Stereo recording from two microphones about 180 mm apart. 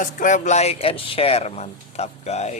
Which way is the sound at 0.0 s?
45° left (ahead or behind).